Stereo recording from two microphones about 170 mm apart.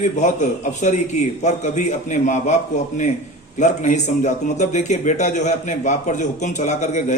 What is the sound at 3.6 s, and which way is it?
A man's voice, 45° left (ahead or behind).